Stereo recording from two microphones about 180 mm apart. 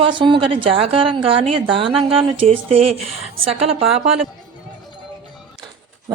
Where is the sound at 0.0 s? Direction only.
25° right (ahead or behind).